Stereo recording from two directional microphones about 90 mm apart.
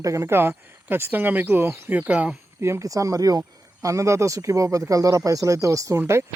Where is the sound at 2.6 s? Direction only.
35° right (ahead or behind).